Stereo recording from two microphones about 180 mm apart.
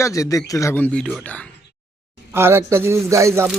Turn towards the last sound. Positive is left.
turn(degrees=-15)  # may be behind; listen again after turning